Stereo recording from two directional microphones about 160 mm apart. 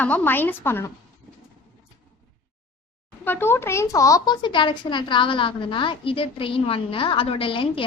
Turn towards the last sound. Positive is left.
turn(degrees=35)  # may be behind; listen again after turning